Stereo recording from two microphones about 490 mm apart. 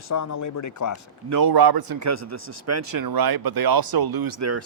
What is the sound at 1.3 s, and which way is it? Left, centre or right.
Speech, right.